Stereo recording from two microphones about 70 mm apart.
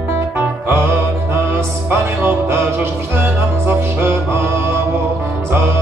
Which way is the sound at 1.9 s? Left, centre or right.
Right.